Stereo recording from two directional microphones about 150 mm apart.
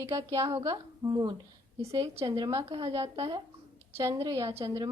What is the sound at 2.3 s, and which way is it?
A woman's voice, 25° right (ahead or behind).